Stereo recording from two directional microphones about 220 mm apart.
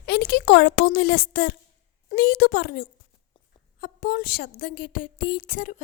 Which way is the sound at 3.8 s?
40° left (ahead or behind).